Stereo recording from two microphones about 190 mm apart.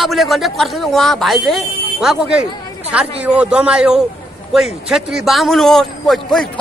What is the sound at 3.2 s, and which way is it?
A man's voice, 5° right (ahead or behind).